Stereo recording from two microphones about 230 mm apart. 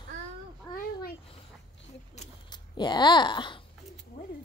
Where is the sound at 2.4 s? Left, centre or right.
Centre.